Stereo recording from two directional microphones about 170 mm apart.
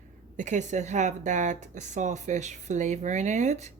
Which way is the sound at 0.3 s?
45° right (ahead or behind).